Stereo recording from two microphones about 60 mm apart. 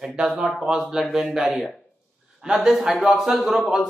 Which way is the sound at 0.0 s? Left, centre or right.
Centre.